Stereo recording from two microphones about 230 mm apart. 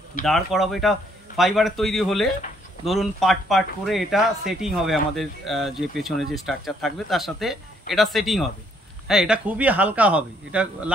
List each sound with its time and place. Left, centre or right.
0.2 s speech: centre